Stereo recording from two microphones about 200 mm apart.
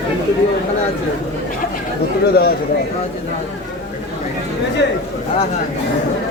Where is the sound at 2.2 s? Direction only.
50° left (ahead or behind).